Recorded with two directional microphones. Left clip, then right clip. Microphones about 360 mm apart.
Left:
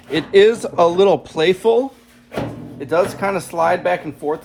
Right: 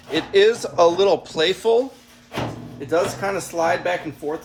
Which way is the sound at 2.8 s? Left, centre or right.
Centre.